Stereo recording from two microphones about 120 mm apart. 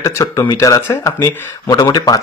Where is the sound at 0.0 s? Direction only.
25° left (ahead or behind).